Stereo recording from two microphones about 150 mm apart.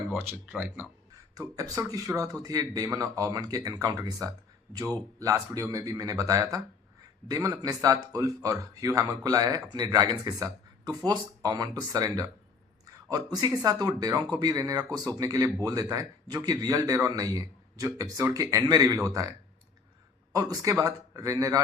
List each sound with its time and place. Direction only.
0.1 s speech: 10° right (ahead or behind)
1.4 s speech: 25° right (ahead or behind)
12.8 s a sound: 25° right (ahead or behind)
13.3 s speech: 25° right (ahead or behind)
20.3 s speech: 25° right (ahead or behind)